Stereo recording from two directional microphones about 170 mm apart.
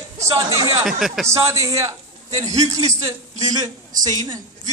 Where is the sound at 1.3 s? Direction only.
20° right (ahead or behind).